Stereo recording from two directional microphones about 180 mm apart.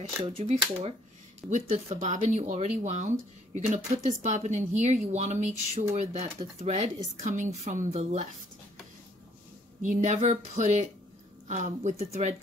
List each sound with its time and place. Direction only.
0.2 s speech: 35° right (ahead or behind)
9.8 s speech: 45° right (ahead or behind)